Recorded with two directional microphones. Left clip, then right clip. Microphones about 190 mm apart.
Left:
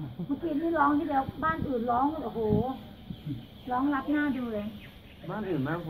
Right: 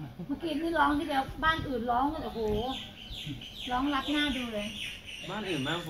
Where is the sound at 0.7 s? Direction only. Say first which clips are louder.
Left 1 dB; 60° right (ahead or behind).